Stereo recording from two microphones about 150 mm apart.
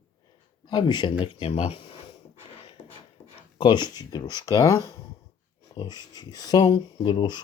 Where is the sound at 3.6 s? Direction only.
30° left (ahead or behind).